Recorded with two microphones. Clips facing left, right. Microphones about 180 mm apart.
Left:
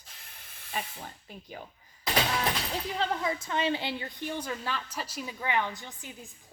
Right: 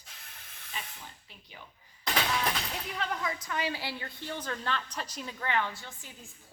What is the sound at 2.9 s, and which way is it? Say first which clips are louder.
A woman's voice: left 4 dB; 30° left (ahead or behind).